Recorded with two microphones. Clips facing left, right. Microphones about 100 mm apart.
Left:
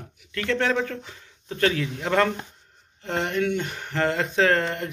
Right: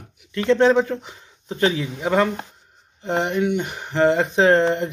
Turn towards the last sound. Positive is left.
turn(degrees=-20)  # may be behind; listen again after turning